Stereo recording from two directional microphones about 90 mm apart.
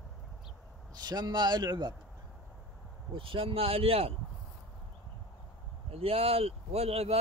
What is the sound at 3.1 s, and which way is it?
Speech, 80° right.